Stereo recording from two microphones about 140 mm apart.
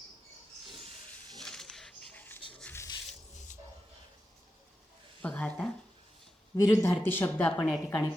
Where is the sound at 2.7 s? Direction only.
20° left (ahead or behind).